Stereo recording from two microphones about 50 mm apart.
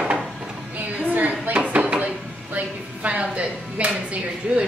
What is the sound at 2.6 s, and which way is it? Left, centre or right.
Speech, right.